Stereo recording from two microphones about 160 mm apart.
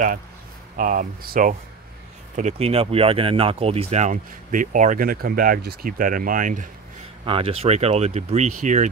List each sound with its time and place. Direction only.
0.7 s speech: 55° right (ahead or behind)
2.3 s speech: 45° right (ahead or behind)
7.2 s speech: 35° right (ahead or behind)